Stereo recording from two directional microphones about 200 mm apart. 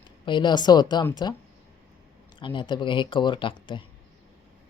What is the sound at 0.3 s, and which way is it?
Speech, 20° left (ahead or behind).